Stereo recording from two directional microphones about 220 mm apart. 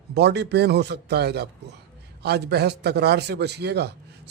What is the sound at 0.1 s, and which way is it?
A man's voice, 50° right (ahead or behind).